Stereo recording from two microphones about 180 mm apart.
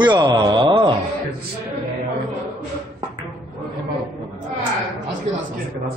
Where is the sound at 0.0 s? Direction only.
25° right (ahead or behind).